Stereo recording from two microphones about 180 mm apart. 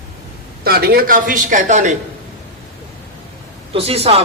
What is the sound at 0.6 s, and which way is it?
Speech, 60° right (ahead or behind).